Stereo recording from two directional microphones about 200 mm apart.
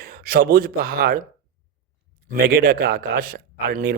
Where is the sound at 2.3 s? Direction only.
45° right (ahead or behind).